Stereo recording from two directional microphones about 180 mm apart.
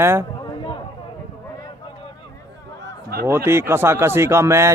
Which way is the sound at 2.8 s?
60° right (ahead or behind).